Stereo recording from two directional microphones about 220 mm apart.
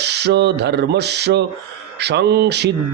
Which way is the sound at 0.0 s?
50° right (ahead or behind).